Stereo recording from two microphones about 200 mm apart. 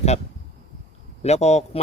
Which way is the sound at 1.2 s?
30° left (ahead or behind).